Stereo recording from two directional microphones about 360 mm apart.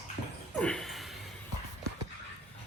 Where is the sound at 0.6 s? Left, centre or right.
Centre.